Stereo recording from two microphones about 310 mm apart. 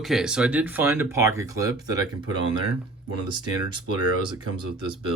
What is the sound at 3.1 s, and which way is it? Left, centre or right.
Speech, centre.